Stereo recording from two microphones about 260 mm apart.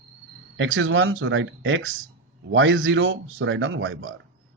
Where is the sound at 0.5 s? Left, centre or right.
Right.